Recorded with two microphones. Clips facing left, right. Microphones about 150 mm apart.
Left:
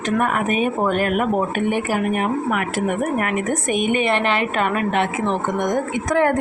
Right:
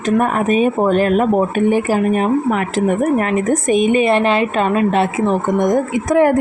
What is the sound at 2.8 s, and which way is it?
A woman's voice, 30° right (ahead or behind).